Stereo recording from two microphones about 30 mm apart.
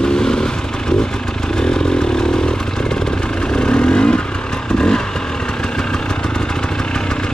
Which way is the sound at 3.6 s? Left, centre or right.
Left.